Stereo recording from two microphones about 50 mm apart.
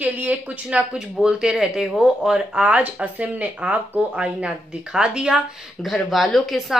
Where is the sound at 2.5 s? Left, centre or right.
Right.